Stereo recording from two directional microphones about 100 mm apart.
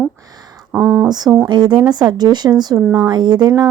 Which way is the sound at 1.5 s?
50° right (ahead or behind).